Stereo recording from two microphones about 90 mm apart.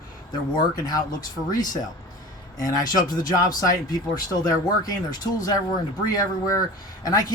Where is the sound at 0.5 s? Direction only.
50° left (ahead or behind).